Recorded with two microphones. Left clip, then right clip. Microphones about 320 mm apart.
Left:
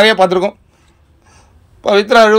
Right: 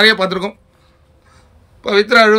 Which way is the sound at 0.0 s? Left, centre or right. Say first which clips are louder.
Left 3 dB; centre.